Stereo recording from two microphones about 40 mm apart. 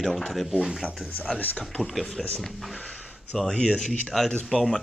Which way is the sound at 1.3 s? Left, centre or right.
Left.